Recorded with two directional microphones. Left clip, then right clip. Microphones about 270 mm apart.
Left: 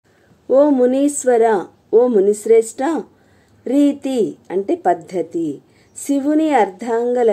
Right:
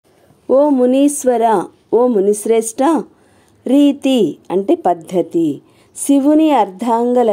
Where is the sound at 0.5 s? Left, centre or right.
Right.